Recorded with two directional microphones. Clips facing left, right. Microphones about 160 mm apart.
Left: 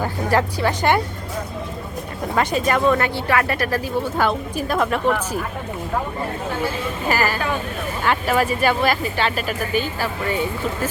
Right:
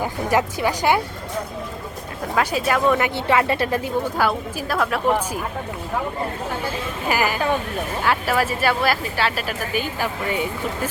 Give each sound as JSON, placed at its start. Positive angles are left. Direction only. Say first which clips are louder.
{"t": 0.0, "sound": "speech", "louder": "left 1 dB", "side_deg": -15}
{"t": 2.3, "sound": "speech", "louder": "left 1 dB", "side_deg": -5}
{"t": 3.2, "sound": "speech", "louder": "right 1 dB", "side_deg": -20}
{"t": 4.2, "sound": "speech", "louder": "left 1 dB", "side_deg": -5}
{"t": 7.1, "sound": "speech", "louder": "right 1 dB", "side_deg": -15}